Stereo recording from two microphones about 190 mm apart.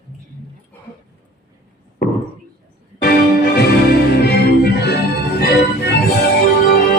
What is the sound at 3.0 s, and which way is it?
Music, 55° left (ahead or behind).